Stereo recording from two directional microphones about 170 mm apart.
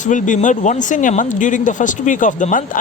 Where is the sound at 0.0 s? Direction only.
50° left (ahead or behind).